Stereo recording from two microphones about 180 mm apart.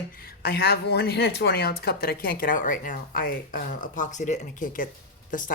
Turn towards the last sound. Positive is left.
turn(degrees=45)  # may be behind; listen again after turning